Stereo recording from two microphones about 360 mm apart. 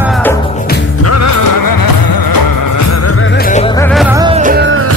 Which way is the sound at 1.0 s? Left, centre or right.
Left.